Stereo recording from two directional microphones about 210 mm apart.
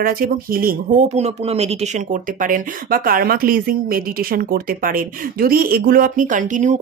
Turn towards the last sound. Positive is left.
turn(degrees=-35)  # may be behind; listen again after turning